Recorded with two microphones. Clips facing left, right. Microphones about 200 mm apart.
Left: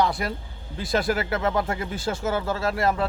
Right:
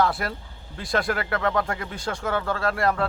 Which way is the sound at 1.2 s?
25° left (ahead or behind).